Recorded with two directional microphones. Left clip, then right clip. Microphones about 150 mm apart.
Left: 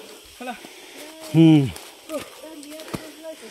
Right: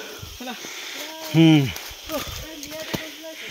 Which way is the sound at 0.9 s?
50° left (ahead or behind).